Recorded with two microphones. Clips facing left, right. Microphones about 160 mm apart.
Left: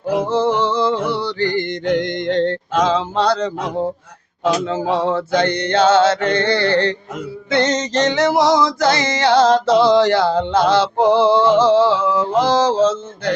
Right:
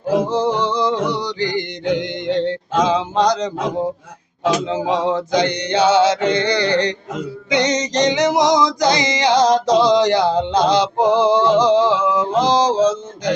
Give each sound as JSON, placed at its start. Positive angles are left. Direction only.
{"t": 0.3, "sound": "male singing", "side_deg": -15}